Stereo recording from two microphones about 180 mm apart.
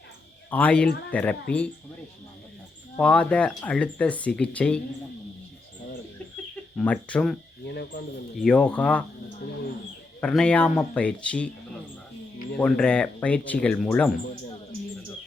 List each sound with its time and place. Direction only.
0.5 s speech: 5° left (ahead or behind)
3.0 s speech: 5° left (ahead or behind)
6.7 s speech: 5° left (ahead or behind)
7.7 s speech: 70° left (ahead or behind)
8.4 s speech: 5° left (ahead or behind)
10.2 s speech: 5° left (ahead or behind)
12.5 s speech: 5° left (ahead or behind)